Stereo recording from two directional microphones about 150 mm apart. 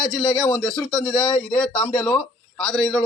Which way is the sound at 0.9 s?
5° left (ahead or behind).